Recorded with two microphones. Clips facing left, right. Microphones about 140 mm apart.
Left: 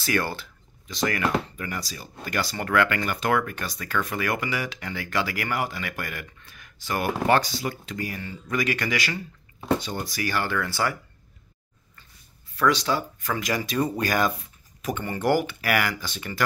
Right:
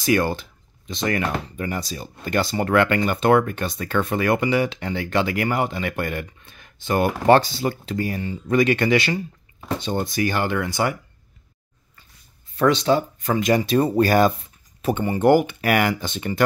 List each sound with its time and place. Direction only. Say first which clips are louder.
0.0 s speech: right 6 dB; 20° right (ahead or behind)
12.5 s speech: right 5 dB; 25° right (ahead or behind)